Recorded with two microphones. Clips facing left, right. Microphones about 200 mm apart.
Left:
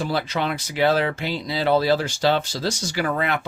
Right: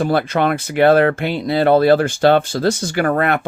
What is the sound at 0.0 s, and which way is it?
Speech, 55° right (ahead or behind).